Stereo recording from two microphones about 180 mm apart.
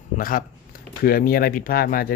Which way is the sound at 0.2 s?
50° left (ahead or behind).